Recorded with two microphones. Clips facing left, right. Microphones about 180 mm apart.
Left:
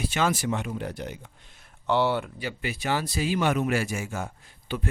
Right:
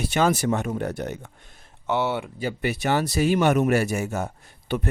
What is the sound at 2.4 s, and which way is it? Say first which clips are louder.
Speech: right 10 dB; 65° right (ahead or behind).